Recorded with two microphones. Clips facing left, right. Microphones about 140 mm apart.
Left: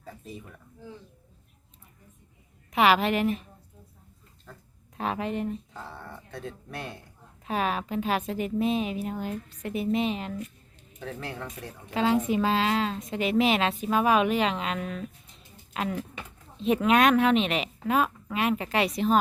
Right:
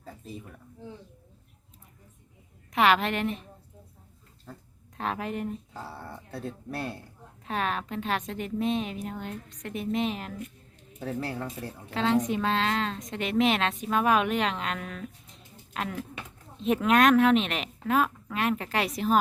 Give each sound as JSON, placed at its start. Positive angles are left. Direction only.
{"t": 0.0, "sound": "a sound", "side_deg": 0}
{"t": 2.7, "sound": "a woman's voice", "side_deg": 5}
{"t": 4.5, "sound": "speech", "side_deg": -20}
{"t": 4.9, "sound": "a woman's voice", "side_deg": 0}
{"t": 7.4, "sound": "a woman's voice", "side_deg": 5}
{"t": 11.9, "sound": "a woman's voice", "side_deg": 10}